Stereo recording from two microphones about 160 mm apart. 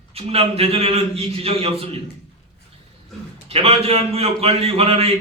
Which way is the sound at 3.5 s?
40° right (ahead or behind).